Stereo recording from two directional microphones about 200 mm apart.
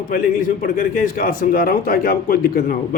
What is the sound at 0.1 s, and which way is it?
A man's voice, 45° left (ahead or behind).